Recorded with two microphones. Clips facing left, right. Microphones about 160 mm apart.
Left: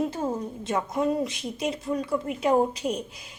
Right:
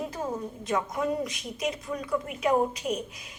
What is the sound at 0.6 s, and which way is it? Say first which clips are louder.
A woman's voice: left 2 dB; 25° left (ahead or behind).